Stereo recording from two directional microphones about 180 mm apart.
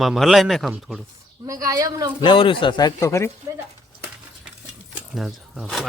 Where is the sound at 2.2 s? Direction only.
25° left (ahead or behind).